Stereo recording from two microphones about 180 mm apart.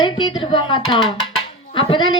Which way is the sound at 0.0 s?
25° left (ahead or behind).